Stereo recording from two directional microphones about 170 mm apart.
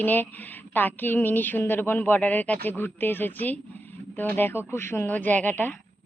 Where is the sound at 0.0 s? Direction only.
10° left (ahead or behind).